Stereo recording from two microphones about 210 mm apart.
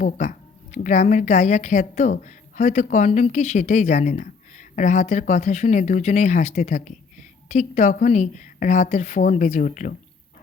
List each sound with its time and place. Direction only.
0.0 s a woman's voice: 40° left (ahead or behind)